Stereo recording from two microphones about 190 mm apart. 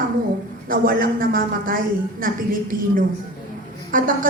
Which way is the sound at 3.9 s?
45° right (ahead or behind).